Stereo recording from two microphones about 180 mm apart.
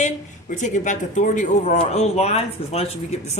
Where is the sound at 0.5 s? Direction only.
45° left (ahead or behind).